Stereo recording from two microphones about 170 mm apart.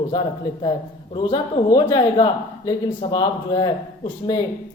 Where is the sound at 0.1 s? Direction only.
30° left (ahead or behind).